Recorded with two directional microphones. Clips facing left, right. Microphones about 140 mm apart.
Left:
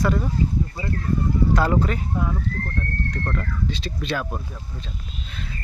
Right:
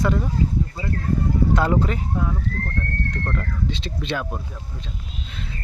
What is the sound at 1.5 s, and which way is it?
Speech, 20° right (ahead or behind).